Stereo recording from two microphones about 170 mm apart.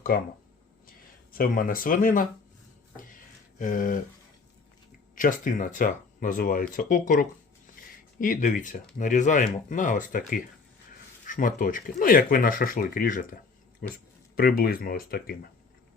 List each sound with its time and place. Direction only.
0.9 s speech: 60° left (ahead or behind)
3.6 s speech: 50° left (ahead or behind)
5.1 s speech: 50° left (ahead or behind)